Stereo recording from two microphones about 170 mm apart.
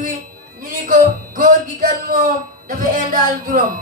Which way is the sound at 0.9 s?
55° right (ahead or behind).